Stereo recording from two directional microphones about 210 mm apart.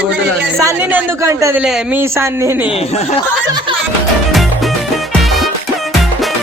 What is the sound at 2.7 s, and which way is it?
Speech, 30° left (ahead or behind).